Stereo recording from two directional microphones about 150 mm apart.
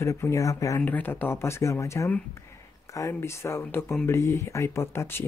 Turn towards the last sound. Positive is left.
turn(degrees=15)  # may be behind; listen again after turning